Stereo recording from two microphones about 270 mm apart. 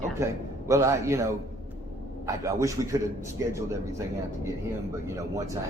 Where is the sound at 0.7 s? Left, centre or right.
Centre.